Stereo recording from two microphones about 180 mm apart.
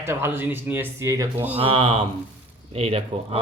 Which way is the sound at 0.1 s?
15° right (ahead or behind).